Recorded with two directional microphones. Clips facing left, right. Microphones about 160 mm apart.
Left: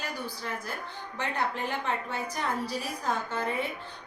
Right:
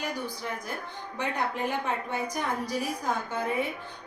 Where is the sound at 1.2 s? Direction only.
15° right (ahead or behind).